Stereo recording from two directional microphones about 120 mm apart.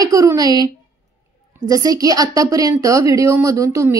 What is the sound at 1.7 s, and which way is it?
A woman's voice, 30° right (ahead or behind).